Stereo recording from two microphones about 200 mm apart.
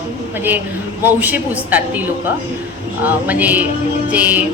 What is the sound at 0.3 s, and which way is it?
Speech, 10° right (ahead or behind).